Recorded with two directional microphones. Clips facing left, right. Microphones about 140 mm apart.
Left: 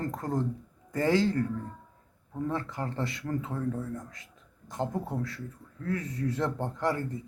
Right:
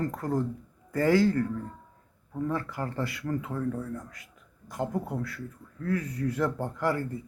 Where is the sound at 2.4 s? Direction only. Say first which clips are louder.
Right 1 dB; 25° left (ahead or behind).